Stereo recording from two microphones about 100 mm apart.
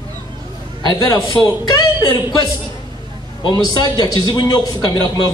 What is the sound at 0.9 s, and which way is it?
Speech, 35° left (ahead or behind).